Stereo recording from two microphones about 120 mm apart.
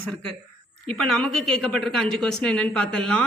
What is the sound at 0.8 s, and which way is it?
A woman's voice, 10° left (ahead or behind).